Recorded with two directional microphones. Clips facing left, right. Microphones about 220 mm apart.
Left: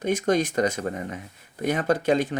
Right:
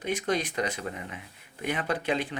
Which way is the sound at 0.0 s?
45° left (ahead or behind).